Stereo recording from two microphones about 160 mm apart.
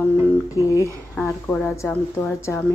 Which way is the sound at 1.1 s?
15° left (ahead or behind).